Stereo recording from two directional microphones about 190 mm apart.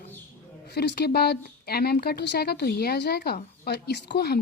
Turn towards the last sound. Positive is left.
turn(degrees=60)  # may be behind; listen again after turning